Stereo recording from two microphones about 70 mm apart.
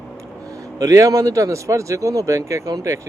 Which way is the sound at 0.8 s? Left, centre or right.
Right.